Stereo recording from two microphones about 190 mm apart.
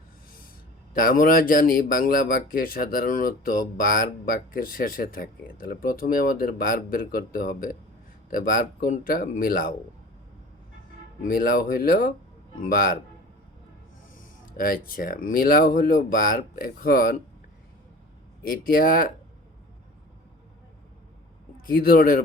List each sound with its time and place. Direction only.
0.9 s speech: 50° left (ahead or behind)
11.2 s speech: 50° left (ahead or behind)
14.5 s speech: 50° left (ahead or behind)
18.4 s speech: 50° left (ahead or behind)
21.7 s speech: 50° left (ahead or behind)